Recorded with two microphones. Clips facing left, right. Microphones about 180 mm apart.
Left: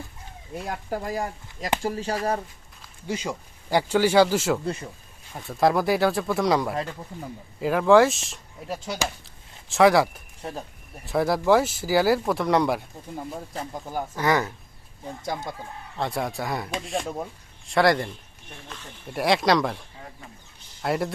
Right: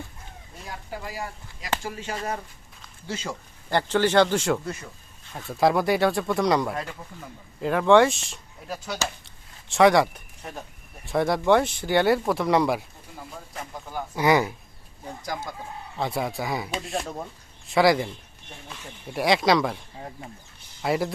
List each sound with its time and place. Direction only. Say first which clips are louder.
0.5 s speech: left 8 dB; 50° left (ahead or behind)
3.1 s a man's voice: left 3 dB; 15° left (ahead or behind)
4.6 s speech: left 4 dB; 30° left (ahead or behind)
5.5 s speech: even; centre (ahead or behind)
9.2 s a sound: left 2 dB; centre (ahead or behind)
11.0 s speech: even; centre (ahead or behind)
13.5 s speech: left 4 dB; 30° left (ahead or behind)
14.2 s speech: right 3 dB; 10° right (ahead or behind)
16.0 s speech: even; centre (ahead or behind)
20.8 s speech: right 1 dB; centre (ahead or behind)